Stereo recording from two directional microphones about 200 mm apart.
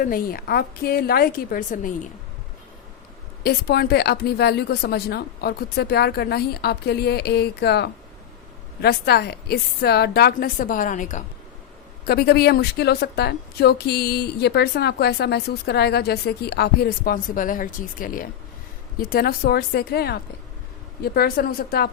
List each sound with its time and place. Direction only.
0.0 s a woman's voice: 45° left (ahead or behind)
3.4 s a woman's voice: 50° left (ahead or behind)
12.0 s a woman's voice: 50° left (ahead or behind)